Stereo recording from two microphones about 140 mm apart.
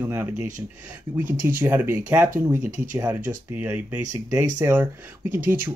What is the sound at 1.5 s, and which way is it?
Speech, 15° right (ahead or behind).